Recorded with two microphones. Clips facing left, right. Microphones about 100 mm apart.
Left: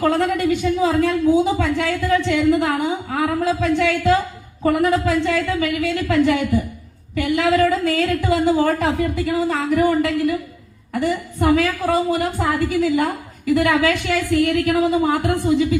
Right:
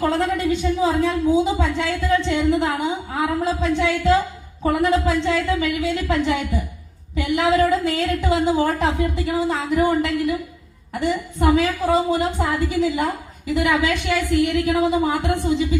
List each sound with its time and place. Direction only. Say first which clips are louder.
0.2 s a woman's voice: left 2 dB; 20° right (ahead or behind)